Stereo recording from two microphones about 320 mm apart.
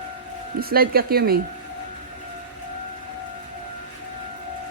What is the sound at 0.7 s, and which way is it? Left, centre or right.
Speech, right.